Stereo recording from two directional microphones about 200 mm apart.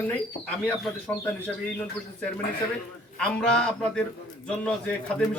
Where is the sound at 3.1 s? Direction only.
5° left (ahead or behind).